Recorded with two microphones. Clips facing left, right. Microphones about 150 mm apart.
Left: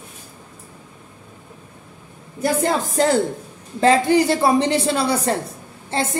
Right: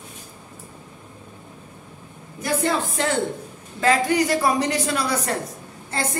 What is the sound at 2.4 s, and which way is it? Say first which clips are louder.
A woman's voice: left 3 dB; 35° left (ahead or behind).